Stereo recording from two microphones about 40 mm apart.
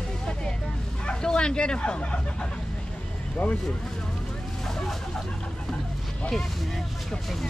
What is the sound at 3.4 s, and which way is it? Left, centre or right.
Speech, left.